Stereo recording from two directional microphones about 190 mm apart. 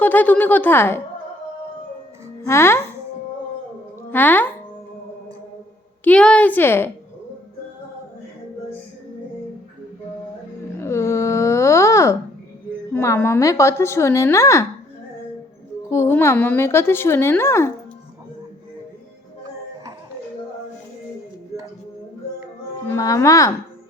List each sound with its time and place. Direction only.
0.0 s a woman's voice: 10° left (ahead or behind)
2.5 s a woman's voice: 15° left (ahead or behind)
4.1 s a woman's voice: 10° left (ahead or behind)
6.1 s a woman's voice: 5° left (ahead or behind)
10.8 s a sound: 15° left (ahead or behind)
12.9 s a woman's voice: 15° left (ahead or behind)
15.9 s a woman's voice: 15° left (ahead or behind)
22.9 s a woman's voice: 15° left (ahead or behind)